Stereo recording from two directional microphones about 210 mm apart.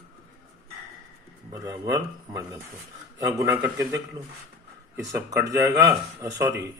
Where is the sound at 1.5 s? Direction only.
15° right (ahead or behind).